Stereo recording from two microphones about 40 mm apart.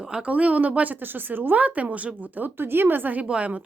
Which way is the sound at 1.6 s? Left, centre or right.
Right.